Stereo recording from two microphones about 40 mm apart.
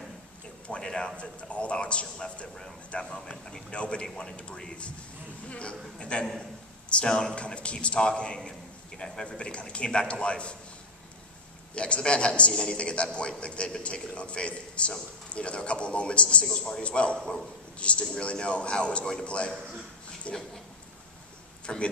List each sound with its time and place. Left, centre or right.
0.8 s a man's voice: centre
1.1 s a man's voice: left
11.7 s a man's voice: left
21.7 s a man's voice: left